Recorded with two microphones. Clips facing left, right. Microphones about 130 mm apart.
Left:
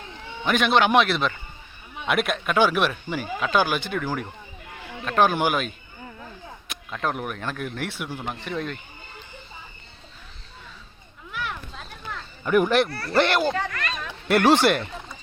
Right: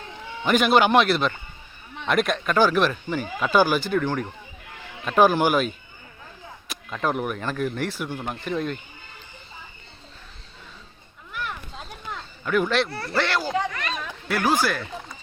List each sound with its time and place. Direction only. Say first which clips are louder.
0.4 s speech: right 2 dB; centre (ahead or behind)
12.5 s speech: left 3 dB; 15° left (ahead or behind)
12.9 s speech: even; 25° right (ahead or behind)
13.1 s speech: left 4 dB; 20° left (ahead or behind)
13.5 s a sound: right 1 dB; 10° right (ahead or behind)
14.3 s speech: left 5 dB; 70° left (ahead or behind)